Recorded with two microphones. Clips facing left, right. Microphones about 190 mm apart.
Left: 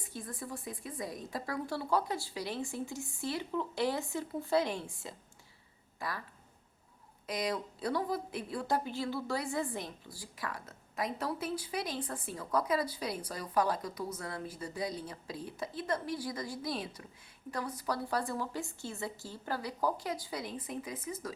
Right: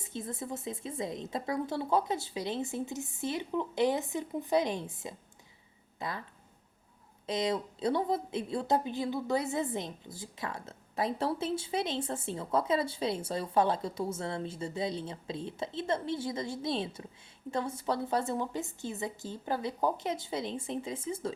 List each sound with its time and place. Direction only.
0.0 s a woman's voice: 25° right (ahead or behind)
7.3 s a woman's voice: 25° right (ahead or behind)